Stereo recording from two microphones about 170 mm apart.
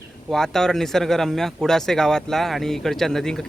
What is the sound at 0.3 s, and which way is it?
Speech, 5° left (ahead or behind).